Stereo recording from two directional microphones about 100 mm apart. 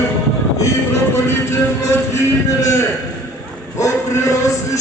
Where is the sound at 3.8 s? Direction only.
30° left (ahead or behind).